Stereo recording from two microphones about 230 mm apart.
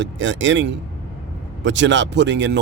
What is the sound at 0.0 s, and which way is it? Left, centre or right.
Speech, right.